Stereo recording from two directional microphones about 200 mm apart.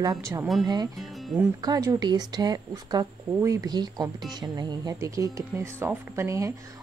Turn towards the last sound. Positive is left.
turn(degrees=-15)  # may be behind; listen again after turning